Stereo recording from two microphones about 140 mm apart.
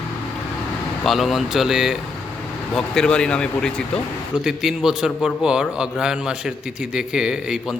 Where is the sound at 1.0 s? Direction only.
Centre (ahead or behind).